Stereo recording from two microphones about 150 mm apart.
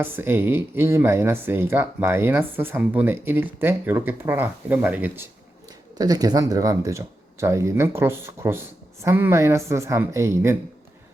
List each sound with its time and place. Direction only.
0.0 s speech: 15° right (ahead or behind)
6.0 s speech: 25° right (ahead or behind)